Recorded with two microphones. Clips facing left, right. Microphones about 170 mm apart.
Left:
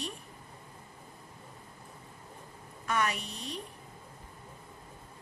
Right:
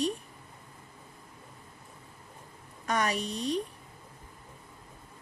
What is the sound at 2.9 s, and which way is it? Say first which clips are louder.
Speech: right 2 dB; 35° right (ahead or behind).